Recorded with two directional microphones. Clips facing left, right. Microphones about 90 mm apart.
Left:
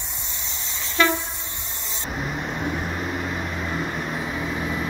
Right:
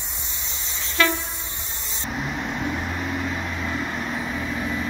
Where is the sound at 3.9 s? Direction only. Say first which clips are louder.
Even; 10° left (ahead or behind).